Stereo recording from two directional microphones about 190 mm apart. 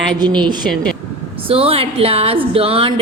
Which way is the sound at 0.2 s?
25° right (ahead or behind).